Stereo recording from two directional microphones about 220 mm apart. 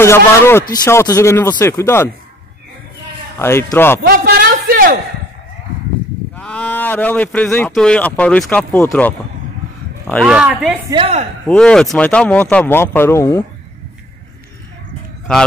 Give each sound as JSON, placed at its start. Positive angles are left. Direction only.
{"t": 0.0, "sound": "speech", "side_deg": 10}
{"t": 3.3, "sound": "speech", "side_deg": 10}
{"t": 4.1, "sound": "a sound", "side_deg": -45}
{"t": 6.3, "sound": "speech", "side_deg": 5}
{"t": 10.2, "sound": "speech", "side_deg": -5}
{"t": 10.9, "sound": "speech", "side_deg": -25}
{"t": 11.4, "sound": "speech", "side_deg": 5}